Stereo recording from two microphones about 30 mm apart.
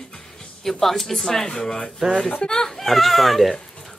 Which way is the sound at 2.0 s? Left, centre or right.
Centre.